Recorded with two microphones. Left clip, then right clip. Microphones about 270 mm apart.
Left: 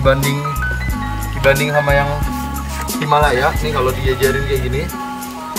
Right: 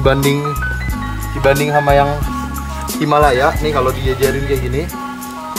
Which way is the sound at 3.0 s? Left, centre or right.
Right.